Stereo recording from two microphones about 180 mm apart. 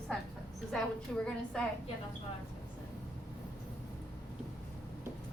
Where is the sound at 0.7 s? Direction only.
5° left (ahead or behind).